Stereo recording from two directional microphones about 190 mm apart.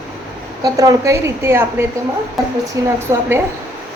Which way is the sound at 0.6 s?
20° right (ahead or behind).